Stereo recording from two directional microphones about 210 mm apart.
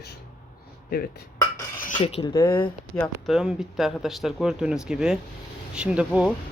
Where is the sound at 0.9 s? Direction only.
45° left (ahead or behind).